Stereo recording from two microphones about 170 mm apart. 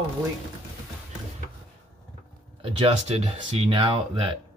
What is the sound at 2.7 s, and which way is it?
Speech, 35° right (ahead or behind).